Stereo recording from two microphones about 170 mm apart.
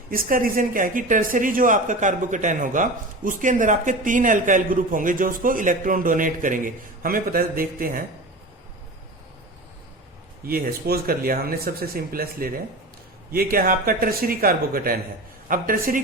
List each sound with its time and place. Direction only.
0.1 s speech: 55° right (ahead or behind)
10.4 s speech: 60° right (ahead or behind)